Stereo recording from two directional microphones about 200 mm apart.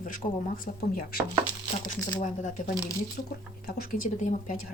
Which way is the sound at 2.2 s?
35° left (ahead or behind).